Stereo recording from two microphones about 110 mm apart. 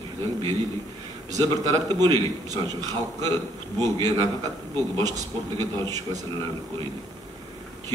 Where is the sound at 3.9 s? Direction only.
45° right (ahead or behind).